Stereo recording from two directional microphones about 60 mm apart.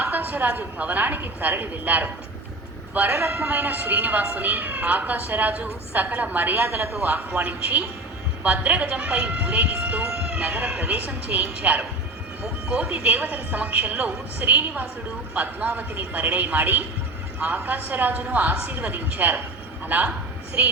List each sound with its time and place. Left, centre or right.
0.0 s a sound: right
0.8 s speech: right
7.3 s speech: right
12.6 s speech: centre; by 20.7 s right